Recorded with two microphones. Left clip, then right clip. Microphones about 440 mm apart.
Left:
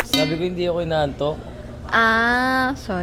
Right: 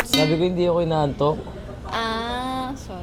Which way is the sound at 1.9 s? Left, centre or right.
Left.